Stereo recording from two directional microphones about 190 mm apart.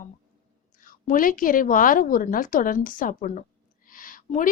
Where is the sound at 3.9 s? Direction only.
45° left (ahead or behind).